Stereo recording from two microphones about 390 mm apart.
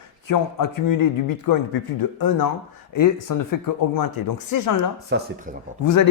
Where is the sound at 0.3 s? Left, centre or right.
Left.